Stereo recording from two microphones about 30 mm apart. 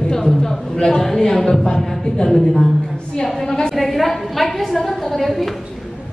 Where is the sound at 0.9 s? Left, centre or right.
Centre.